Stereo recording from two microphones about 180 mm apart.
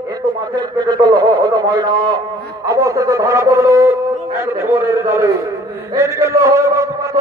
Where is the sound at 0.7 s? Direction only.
25° right (ahead or behind).